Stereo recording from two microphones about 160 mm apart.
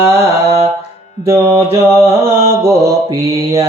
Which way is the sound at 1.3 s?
15° right (ahead or behind).